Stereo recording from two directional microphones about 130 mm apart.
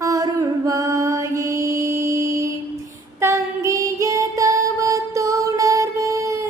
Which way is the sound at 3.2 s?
20° right (ahead or behind).